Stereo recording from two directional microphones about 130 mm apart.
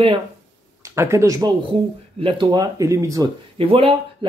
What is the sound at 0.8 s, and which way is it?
Speech, 20° right (ahead or behind).